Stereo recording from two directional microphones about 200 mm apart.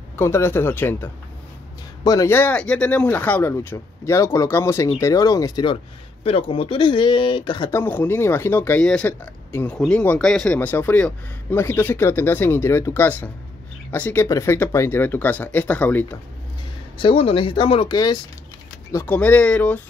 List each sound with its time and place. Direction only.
0.1 s speech: 10° left (ahead or behind)
7.8 s speech: 10° left (ahead or behind)
17.0 s speech: 30° left (ahead or behind); by 19.8 s 5° left (ahead or behind)